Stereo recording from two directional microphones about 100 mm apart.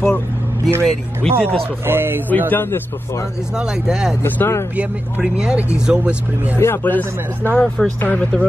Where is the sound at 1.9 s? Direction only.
20° right (ahead or behind).